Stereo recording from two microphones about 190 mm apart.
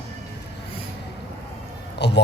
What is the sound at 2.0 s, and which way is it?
Speech, 65° left (ahead or behind).